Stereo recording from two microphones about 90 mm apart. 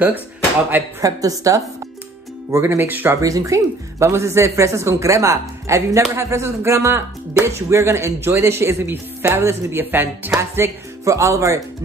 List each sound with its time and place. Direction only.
1.0 s a woman's voice: 40° right (ahead or behind)
2.5 s speech: 25° right (ahead or behind)
3.2 s a woman's voice: 40° right (ahead or behind); by 10.3 s 20° right (ahead or behind)
10.3 s a woman's voice: 30° right (ahead or behind)